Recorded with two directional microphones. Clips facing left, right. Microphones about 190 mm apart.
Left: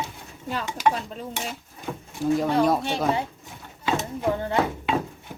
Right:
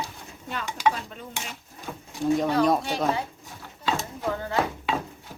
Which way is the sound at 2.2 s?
Centre (ahead or behind).